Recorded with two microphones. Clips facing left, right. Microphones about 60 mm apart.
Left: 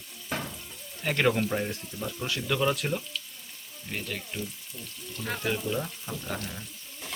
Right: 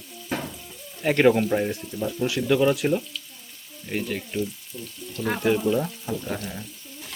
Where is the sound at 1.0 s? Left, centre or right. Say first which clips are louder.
Right 7 dB; centre.